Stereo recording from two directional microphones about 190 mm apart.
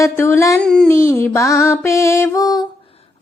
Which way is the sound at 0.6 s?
5° left (ahead or behind).